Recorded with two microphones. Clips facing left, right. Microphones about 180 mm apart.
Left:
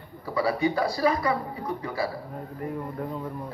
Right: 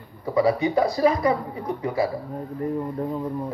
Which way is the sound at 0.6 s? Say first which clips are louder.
Right 4 dB; 20° right (ahead or behind).